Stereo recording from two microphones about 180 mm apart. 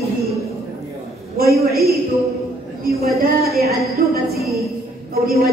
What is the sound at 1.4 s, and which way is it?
Speech, 60° right (ahead or behind).